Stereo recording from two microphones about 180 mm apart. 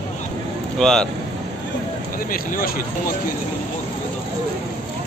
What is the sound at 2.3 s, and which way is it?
Speech, 55° left (ahead or behind).